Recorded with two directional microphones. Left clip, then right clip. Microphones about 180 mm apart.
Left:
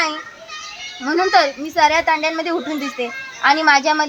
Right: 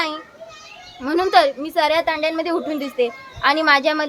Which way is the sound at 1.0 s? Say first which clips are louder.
Left 1 dB; 40° right (ahead or behind).